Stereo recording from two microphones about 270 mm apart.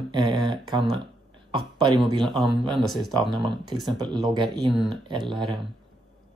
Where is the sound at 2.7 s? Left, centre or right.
Centre.